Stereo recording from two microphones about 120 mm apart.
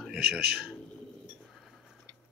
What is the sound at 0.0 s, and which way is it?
Speech, 5° right (ahead or behind).